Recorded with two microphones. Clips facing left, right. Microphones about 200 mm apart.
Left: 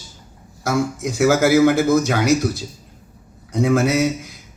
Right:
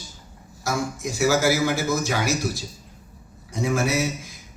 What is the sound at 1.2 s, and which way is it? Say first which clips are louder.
Speech: left 7 dB; 55° left (ahead or behind).